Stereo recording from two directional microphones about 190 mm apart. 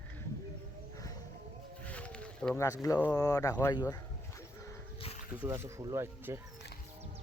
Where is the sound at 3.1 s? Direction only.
20° left (ahead or behind).